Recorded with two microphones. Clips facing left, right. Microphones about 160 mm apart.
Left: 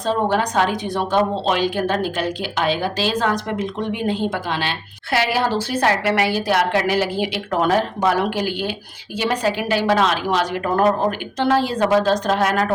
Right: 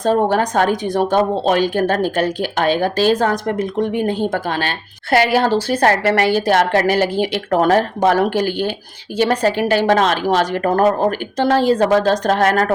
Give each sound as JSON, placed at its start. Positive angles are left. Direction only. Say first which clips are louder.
{"t": 0.0, "sound": "a woman's voice", "louder": "right 4 dB", "side_deg": -45}